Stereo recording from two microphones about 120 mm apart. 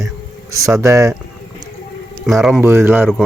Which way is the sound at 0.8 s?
25° right (ahead or behind).